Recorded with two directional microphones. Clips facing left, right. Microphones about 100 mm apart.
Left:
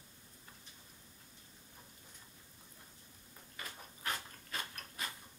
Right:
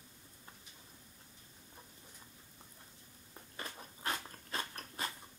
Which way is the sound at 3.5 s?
30° right (ahead or behind).